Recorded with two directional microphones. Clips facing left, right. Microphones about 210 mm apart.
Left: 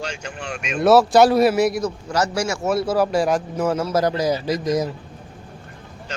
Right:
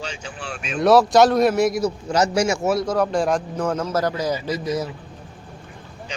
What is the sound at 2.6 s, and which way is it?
A man's voice, 5° left (ahead or behind).